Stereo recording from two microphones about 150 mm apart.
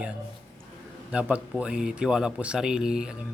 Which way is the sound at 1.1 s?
10° right (ahead or behind).